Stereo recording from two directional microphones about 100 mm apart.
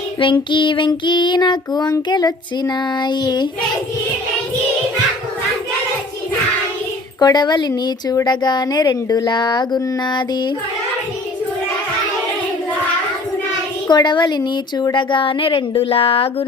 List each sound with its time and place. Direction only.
0.5 s child singing: 55° left (ahead or behind)
7.2 s child singing: 45° left (ahead or behind)
13.8 s child singing: 50° left (ahead or behind)
14.9 s speech: 55° left (ahead or behind)